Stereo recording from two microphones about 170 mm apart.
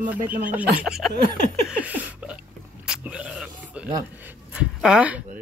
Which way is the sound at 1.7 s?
10° right (ahead or behind).